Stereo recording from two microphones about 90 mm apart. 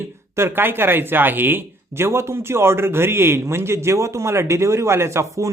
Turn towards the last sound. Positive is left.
turn(degrees=-30)  # may be behind; listen again after turning